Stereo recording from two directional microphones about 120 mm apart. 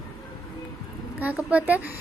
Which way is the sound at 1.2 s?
15° right (ahead or behind).